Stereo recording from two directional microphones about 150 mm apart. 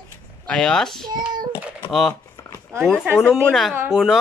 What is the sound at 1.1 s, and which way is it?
Child singing, 25° right (ahead or behind).